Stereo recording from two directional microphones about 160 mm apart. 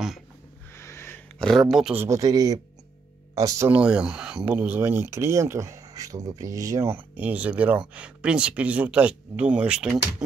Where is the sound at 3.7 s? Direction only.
5° right (ahead or behind).